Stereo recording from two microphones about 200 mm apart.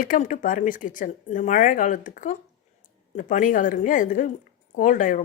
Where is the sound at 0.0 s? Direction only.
45° left (ahead or behind).